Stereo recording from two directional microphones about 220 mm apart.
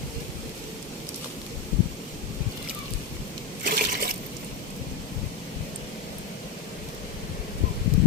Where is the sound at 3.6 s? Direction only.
40° right (ahead or behind).